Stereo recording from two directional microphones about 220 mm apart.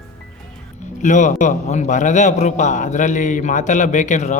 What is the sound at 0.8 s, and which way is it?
A man's voice, 35° left (ahead or behind).